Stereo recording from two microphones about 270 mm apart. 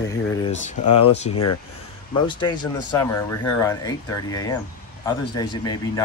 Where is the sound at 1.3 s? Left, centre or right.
Left.